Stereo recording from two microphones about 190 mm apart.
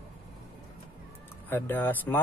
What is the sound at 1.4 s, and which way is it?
Speech, 10° left (ahead or behind).